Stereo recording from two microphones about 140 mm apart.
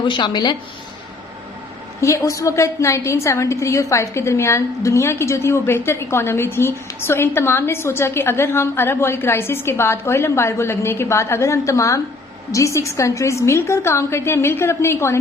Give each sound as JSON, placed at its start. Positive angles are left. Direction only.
{"t": 0.0, "sound": "speech", "side_deg": 35}
{"t": 2.0, "sound": "a woman's voice", "side_deg": 20}